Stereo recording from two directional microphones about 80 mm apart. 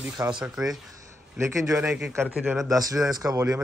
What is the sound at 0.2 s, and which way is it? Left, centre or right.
Speech, right.